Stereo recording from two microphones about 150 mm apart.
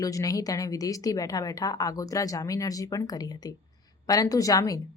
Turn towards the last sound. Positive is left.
turn(degrees=25)  # may be behind; listen again after turning